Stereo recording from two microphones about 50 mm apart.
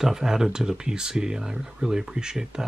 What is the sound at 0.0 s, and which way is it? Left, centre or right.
Speech, centre.